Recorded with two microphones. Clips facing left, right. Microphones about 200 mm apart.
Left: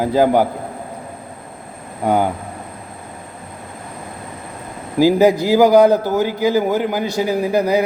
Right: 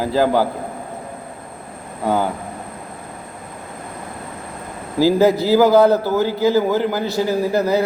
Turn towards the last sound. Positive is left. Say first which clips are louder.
# left 1 dB
turn(degrees=15)  # may be behind; listen again after turning